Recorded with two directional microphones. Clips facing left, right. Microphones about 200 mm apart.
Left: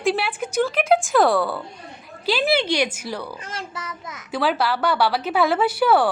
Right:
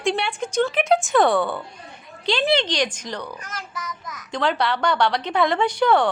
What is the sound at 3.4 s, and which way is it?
Speech, 30° left (ahead or behind).